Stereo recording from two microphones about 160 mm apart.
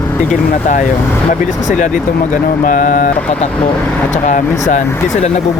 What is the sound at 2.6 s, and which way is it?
Speech, 55° left (ahead or behind).